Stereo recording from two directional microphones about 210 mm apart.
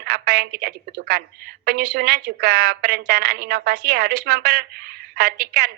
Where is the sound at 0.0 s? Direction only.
50° right (ahead or behind).